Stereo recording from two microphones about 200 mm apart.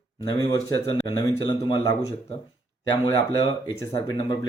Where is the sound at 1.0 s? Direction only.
20° left (ahead or behind).